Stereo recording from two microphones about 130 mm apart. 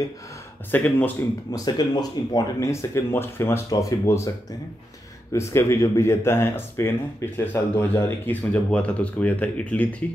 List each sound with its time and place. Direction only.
0.7 s speech: 15° left (ahead or behind)
1.5 s speech: 30° left (ahead or behind); by 10.0 s 10° left (ahead or behind)